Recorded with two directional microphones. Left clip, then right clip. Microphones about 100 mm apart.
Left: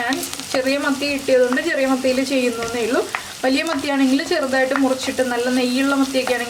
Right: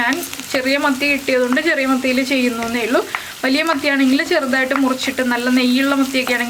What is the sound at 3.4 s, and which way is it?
Speech, 35° right (ahead or behind).